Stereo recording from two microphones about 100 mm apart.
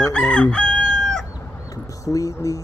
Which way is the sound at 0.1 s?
10° left (ahead or behind).